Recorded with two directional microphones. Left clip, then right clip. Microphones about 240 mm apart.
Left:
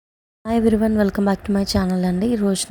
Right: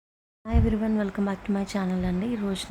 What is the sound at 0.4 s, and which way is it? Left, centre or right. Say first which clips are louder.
A woman's voice: left 10 dB; left.